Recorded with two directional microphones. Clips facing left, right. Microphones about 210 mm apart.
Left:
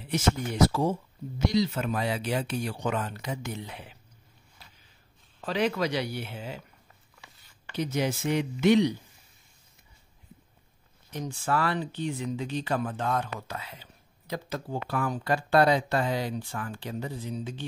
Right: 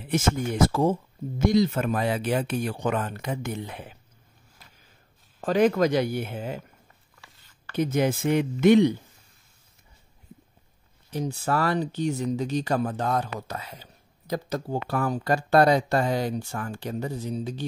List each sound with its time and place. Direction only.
0.0 s speech: 50° right (ahead or behind)
5.4 s speech: 50° right (ahead or behind)
7.7 s speech: 50° right (ahead or behind)
11.1 s speech: 35° right (ahead or behind)